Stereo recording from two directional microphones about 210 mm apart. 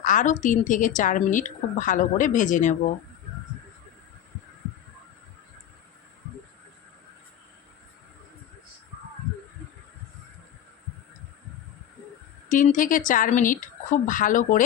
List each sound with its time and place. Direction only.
0.0 s a woman's voice: 35° left (ahead or behind)
12.5 s a woman's voice: 40° left (ahead or behind)